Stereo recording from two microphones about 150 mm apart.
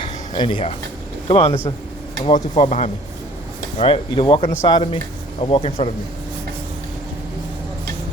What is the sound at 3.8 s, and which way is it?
Speech, 35° left (ahead or behind).